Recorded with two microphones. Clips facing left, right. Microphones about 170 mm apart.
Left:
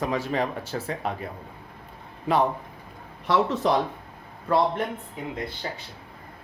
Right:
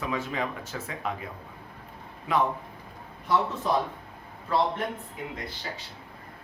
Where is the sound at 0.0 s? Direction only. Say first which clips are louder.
Left 5 dB; 40° left (ahead or behind).